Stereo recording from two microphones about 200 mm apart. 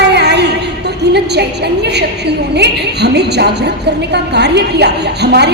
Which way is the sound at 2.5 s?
55° right (ahead or behind).